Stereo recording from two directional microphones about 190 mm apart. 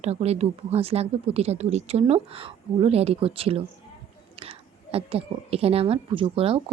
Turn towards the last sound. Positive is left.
turn(degrees=-30)  # may be behind; listen again after turning